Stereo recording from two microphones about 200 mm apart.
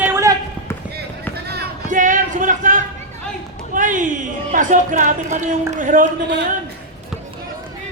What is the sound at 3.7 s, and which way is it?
Speech, 40° right (ahead or behind).